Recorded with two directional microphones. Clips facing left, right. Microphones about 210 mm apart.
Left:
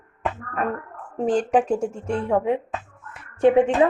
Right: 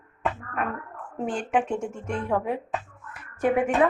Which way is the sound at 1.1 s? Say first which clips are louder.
Left 6 dB; 40° left (ahead or behind).